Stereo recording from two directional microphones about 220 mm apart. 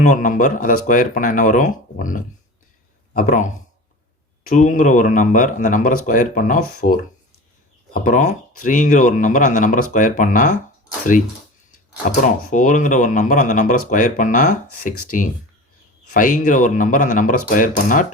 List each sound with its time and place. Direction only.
0.0 s speech: 35° left (ahead or behind)
7.9 s speech: 35° left (ahead or behind)
12.0 s speech: 35° left (ahead or behind)
16.1 s speech: 35° left (ahead or behind)